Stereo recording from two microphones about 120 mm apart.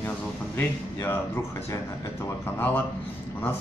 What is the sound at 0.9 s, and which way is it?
Speech, 25° left (ahead or behind).